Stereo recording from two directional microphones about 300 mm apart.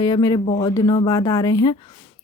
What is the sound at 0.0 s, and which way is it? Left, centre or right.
Speech, centre.